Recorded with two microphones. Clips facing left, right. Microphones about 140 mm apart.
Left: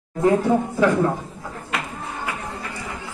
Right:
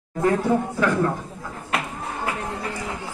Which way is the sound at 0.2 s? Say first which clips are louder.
Left 2 dB; 25° left (ahead or behind).